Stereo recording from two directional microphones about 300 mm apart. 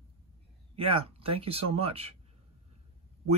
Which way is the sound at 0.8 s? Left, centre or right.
Centre.